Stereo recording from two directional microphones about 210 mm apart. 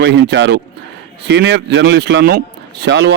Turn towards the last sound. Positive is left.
turn(degrees=-55)  # may be behind; listen again after turning